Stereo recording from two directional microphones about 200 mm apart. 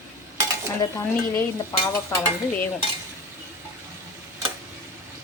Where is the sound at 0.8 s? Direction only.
10° left (ahead or behind).